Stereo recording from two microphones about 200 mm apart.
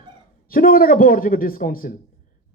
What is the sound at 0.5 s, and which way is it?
Speech, 45° left (ahead or behind).